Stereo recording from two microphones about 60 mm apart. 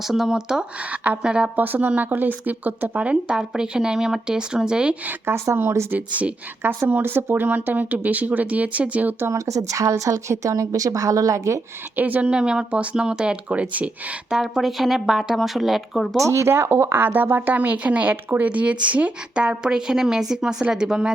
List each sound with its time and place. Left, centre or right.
0.1 s a woman's voice: centre
1.5 s a woman's voice: right; by 4.9 s centre
5.2 s speech: right
5.9 s speech: right
6.6 s speech: right
9.3 s a woman's voice: right
11.9 s speech: right
12.3 s a woman's voice: centre
14.6 s speech: centre
16.2 s a woman's voice: right; by 21.1 s centre